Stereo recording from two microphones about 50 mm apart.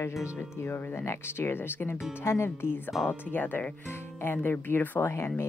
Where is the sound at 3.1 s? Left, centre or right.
Left.